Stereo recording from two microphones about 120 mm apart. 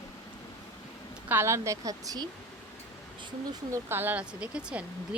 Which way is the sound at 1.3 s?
20° right (ahead or behind).